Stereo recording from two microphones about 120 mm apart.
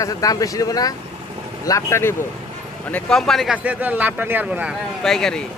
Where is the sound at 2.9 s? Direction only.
5° left (ahead or behind).